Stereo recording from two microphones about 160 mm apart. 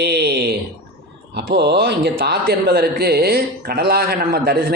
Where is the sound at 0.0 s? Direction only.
90° right.